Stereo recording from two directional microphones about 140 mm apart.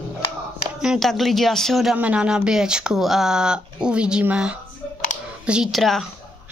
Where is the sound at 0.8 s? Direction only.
Centre (ahead or behind).